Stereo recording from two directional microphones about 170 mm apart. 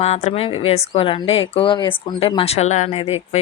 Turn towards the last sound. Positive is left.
turn(degrees=35)  # may be behind; listen again after turning